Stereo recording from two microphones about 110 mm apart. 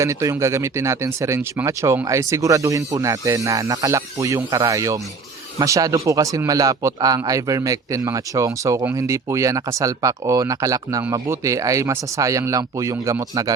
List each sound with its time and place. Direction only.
0.0 s a man's voice: 30° right (ahead or behind)